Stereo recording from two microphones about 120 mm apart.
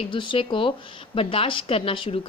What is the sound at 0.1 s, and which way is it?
Speech, 45° left (ahead or behind).